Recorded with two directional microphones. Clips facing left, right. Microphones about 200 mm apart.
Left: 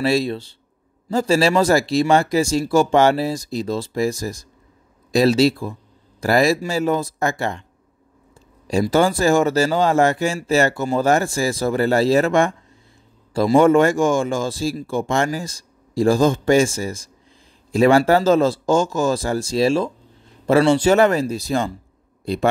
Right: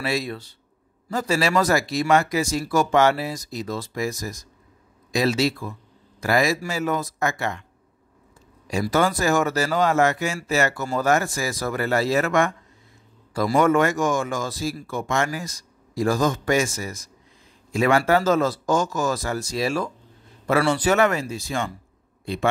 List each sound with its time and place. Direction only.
0.0 s speech: 30° left (ahead or behind)
8.8 s a man's voice: 30° left (ahead or behind)